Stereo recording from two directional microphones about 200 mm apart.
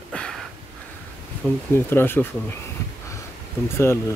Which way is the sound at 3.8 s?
15° left (ahead or behind).